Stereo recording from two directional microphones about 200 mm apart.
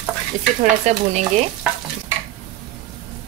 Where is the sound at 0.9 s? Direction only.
35° right (ahead or behind).